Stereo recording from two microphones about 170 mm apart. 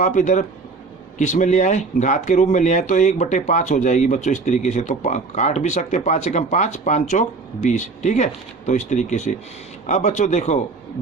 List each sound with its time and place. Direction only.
0.0 s speech: 45° left (ahead or behind)